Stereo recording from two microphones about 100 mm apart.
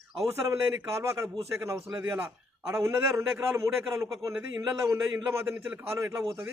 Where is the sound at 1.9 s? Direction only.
15° right (ahead or behind).